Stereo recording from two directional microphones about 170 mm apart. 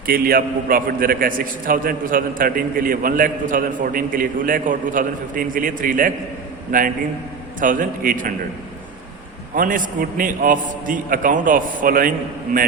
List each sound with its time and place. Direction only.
0.0 s a man's voice: 60° right (ahead or behind)
9.6 s a man's voice: 50° right (ahead or behind)